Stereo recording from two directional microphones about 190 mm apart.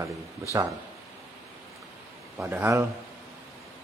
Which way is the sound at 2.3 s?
10° right (ahead or behind).